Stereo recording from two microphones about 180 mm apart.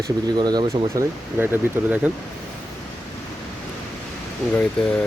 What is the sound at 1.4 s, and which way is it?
Speech, 10° right (ahead or behind).